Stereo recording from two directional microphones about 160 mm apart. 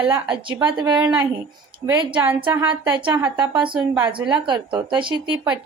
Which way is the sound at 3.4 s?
30° right (ahead or behind).